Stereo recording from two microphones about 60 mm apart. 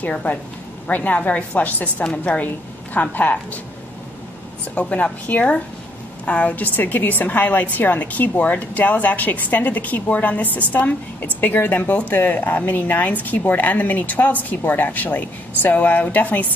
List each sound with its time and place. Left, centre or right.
0.0 s speech: left
4.7 s speech: left